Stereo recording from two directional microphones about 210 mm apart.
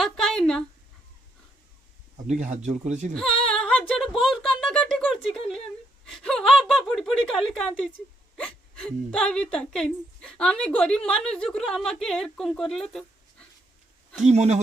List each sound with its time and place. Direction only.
0.0 s speech: centre (ahead or behind)
2.1 s speech: 35° right (ahead or behind)
3.2 s a woman's voice: 5° left (ahead or behind)
12.9 s dog: 5° left (ahead or behind)
14.2 s speech: 35° right (ahead or behind)